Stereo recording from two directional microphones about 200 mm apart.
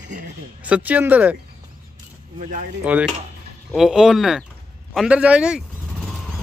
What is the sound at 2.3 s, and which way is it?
Speech, 40° right (ahead or behind).